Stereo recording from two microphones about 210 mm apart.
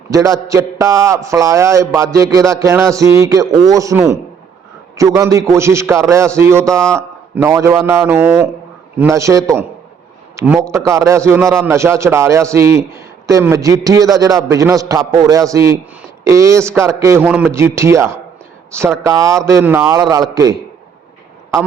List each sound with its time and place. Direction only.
0.1 s a man's voice: 15° right (ahead or behind)